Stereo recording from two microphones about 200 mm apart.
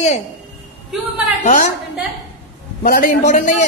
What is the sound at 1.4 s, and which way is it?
Speech, 40° left (ahead or behind).